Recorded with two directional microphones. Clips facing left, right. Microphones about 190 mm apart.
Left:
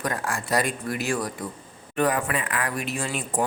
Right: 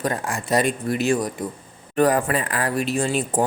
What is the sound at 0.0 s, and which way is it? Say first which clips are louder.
Speech: right 3 dB; 25° right (ahead or behind).